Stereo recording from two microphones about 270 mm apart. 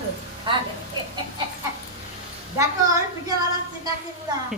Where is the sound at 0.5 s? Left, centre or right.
Centre.